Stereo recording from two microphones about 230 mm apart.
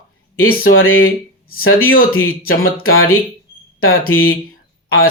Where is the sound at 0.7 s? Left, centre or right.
Left.